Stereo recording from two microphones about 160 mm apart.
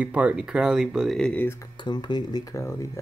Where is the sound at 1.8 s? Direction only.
30° left (ahead or behind).